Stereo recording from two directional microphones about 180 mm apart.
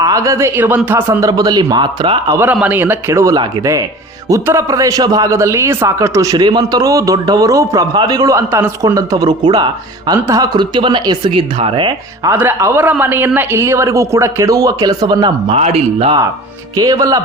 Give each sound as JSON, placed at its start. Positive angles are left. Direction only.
{"t": 0.0, "sound": "a man's voice", "side_deg": -20}
{"t": 2.4, "sound": "a man's voice", "side_deg": -10}
{"t": 12.3, "sound": "a man's voice", "side_deg": -10}
{"t": 16.7, "sound": "a man's voice", "side_deg": -20}